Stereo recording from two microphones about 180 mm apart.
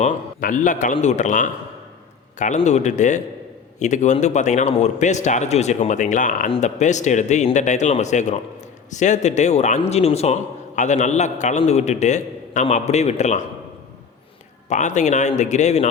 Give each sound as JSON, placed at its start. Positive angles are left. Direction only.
{"t": 0.0, "sound": "a man's voice", "side_deg": 45}
{"t": 2.6, "sound": "a man's voice", "side_deg": 40}
{"t": 14.7, "sound": "a man's voice", "side_deg": 40}